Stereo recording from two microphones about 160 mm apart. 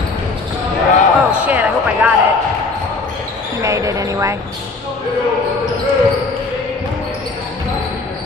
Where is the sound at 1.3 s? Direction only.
10° right (ahead or behind).